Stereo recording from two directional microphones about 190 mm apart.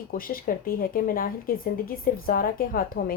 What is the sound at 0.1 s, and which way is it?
Speech, 45° left (ahead or behind).